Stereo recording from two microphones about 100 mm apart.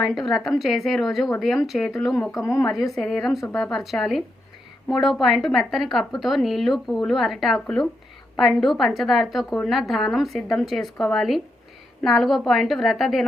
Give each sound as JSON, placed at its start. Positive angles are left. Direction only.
{"t": 0.0, "sound": "speech", "side_deg": 0}
{"t": 2.3, "sound": "speech", "side_deg": 30}
{"t": 2.9, "sound": "speech", "side_deg": 5}